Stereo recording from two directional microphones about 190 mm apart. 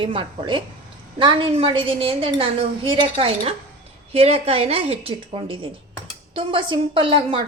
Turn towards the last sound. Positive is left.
turn(degrees=-25)  # may be behind; listen again after turning